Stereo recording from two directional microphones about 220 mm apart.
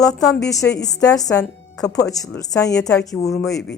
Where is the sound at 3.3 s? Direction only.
Centre (ahead or behind).